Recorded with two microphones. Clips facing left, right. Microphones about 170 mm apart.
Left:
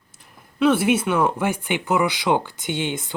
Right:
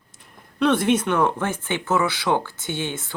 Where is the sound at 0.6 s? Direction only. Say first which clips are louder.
Left 1 dB; 10° left (ahead or behind).